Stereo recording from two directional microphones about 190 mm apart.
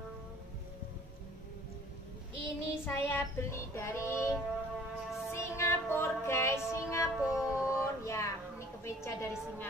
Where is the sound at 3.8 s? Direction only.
15° left (ahead or behind).